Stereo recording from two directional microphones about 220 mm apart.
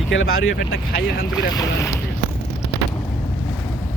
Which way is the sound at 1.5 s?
15° left (ahead or behind).